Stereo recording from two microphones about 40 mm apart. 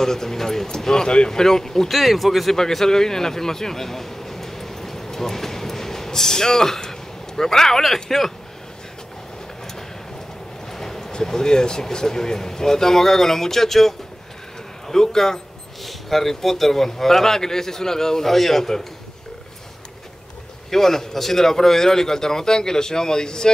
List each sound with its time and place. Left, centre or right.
0.0 s a man's voice: centre
10.7 s speech: centre
20.7 s speech: centre